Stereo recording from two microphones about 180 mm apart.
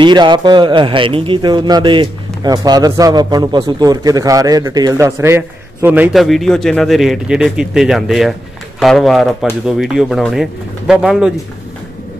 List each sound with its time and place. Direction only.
0.0 s a man's voice: 25° right (ahead or behind); by 11.3 s 5° right (ahead or behind)